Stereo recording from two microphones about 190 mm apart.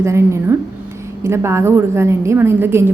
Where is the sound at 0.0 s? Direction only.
15° right (ahead or behind).